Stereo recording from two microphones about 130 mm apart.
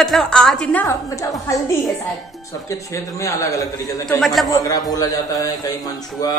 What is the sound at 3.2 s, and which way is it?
Speech, 25° left (ahead or behind).